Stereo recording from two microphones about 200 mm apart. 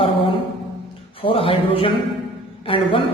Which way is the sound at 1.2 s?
25° left (ahead or behind).